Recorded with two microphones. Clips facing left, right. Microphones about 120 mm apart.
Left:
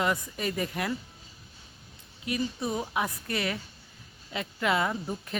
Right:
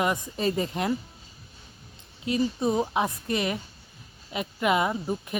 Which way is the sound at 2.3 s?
25° right (ahead or behind).